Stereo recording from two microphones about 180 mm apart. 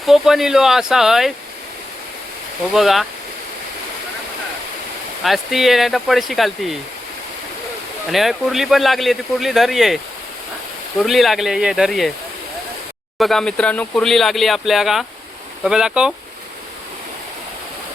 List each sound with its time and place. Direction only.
0.0 s speech: centre (ahead or behind)
2.7 s speech: centre (ahead or behind)
5.2 s speech: centre (ahead or behind)
8.1 s speech: centre (ahead or behind)
11.0 s speech: centre (ahead or behind)
13.1 s speech: centre (ahead or behind)